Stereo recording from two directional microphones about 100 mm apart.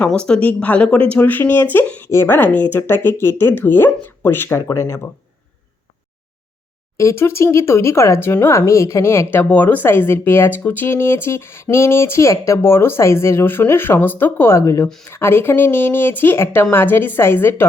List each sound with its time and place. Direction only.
0.1 s speech: 10° left (ahead or behind); by 5.0 s 25° left (ahead or behind)
6.9 s speech: 30° left (ahead or behind)